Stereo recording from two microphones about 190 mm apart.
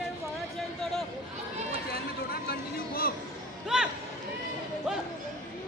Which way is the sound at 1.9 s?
55° left (ahead or behind).